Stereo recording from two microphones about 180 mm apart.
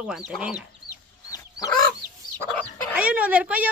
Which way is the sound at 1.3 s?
20° left (ahead or behind).